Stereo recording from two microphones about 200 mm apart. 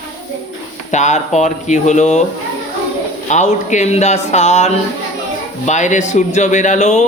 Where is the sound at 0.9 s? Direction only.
35° left (ahead or behind).